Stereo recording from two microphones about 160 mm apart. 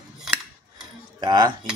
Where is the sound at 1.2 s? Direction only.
25° right (ahead or behind).